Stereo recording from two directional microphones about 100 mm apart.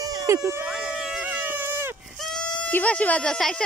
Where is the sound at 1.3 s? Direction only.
15° right (ahead or behind).